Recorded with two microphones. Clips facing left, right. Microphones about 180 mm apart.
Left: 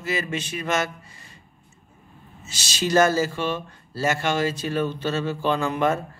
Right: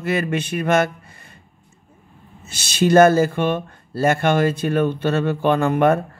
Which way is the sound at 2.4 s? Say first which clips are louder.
Right 8 dB; 55° right (ahead or behind).